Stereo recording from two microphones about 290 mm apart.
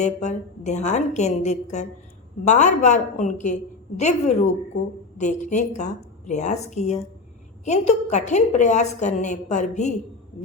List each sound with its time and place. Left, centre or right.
0.0 s a woman's voice: left